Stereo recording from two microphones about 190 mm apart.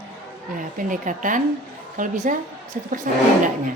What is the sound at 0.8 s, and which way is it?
A woman's voice, 45° right (ahead or behind).